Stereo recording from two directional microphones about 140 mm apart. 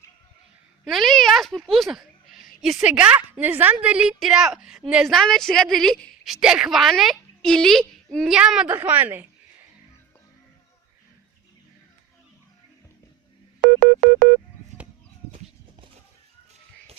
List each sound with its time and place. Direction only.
0.9 s a woman's voice: centre (ahead or behind)
13.6 s telephone dialing: 90° right